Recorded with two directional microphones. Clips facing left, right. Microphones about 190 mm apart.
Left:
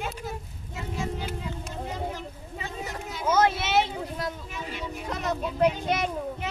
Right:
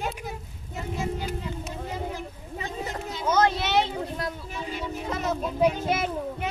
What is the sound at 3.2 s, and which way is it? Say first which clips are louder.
Speech: even; 5° left (ahead or behind).